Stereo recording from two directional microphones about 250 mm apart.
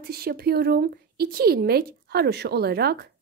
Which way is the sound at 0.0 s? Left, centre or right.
Right.